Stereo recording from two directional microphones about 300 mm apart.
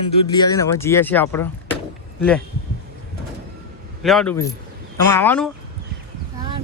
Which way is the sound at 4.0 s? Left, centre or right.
Centre.